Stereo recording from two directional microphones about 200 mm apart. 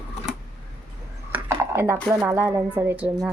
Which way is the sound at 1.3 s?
15° right (ahead or behind).